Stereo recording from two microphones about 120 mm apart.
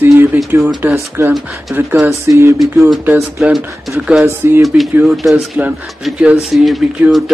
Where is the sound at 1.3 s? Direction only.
Centre (ahead or behind).